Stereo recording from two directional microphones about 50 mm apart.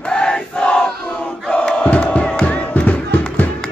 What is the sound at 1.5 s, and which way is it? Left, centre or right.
Crowd, centre.